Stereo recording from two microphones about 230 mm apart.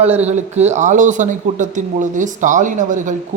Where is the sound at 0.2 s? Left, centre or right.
Right.